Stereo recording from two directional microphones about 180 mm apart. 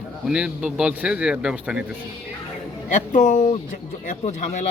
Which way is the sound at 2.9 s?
45° left (ahead or behind).